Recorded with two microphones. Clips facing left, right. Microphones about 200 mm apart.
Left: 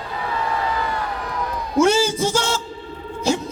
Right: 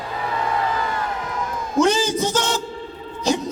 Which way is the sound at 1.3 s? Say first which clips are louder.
Even; 45° right (ahead or behind).